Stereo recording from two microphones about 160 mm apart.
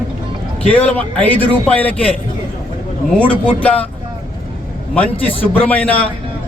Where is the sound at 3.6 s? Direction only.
10° left (ahead or behind).